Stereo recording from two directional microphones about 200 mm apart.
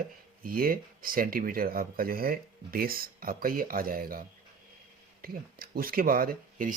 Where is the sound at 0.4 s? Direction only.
45° right (ahead or behind).